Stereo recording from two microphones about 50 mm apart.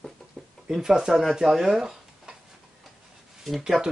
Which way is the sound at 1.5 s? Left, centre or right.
Centre.